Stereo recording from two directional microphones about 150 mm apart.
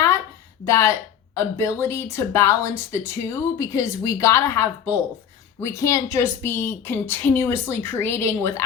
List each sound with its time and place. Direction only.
0.6 s a woman's voice: 20° left (ahead or behind)